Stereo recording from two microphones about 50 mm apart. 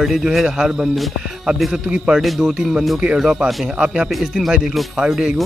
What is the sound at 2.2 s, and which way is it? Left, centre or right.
A man's voice, centre.